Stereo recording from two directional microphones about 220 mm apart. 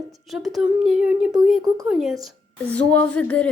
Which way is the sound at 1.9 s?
Centre (ahead or behind).